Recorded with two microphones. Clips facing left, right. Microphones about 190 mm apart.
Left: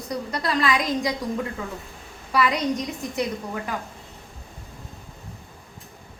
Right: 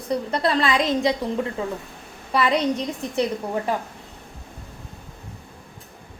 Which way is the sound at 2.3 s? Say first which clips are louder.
Right 2 dB; 25° right (ahead or behind).